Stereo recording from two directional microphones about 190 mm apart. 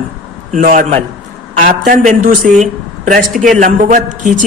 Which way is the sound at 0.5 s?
40° right (ahead or behind).